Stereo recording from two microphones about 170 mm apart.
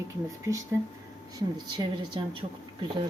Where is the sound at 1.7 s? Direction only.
30° right (ahead or behind).